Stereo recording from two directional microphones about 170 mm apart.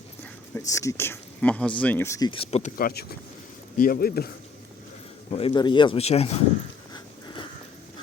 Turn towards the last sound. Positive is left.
turn(degrees=40)  # may be behind; listen again after turning